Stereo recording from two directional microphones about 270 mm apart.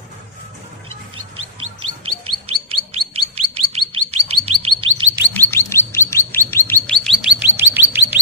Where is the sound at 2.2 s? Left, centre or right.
Right.